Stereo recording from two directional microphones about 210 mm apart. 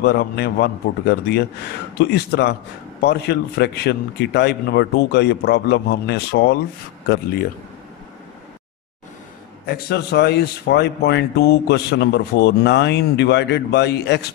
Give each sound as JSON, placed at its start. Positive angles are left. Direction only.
{"t": 0.0, "sound": "speech", "side_deg": 50}
{"t": 9.7, "sound": "speech", "side_deg": 50}